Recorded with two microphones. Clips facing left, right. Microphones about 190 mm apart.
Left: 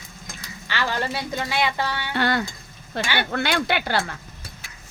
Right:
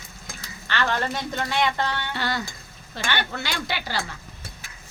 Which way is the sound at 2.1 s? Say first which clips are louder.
Left 6 dB; 60° left (ahead or behind).